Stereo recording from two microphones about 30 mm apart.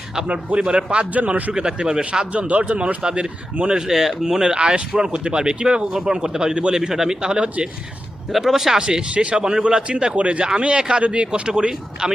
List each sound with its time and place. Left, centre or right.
0.3 s speech: right
1.9 s speech: right
2.3 s speech: right
2.7 s speech: right
3.8 s speech: centre
4.4 s speech: right
6.9 s speech: centre
7.2 s speech: right
8.3 s speech: centre; by 9.8 s right
9.9 s speech: right
10.8 s speech: right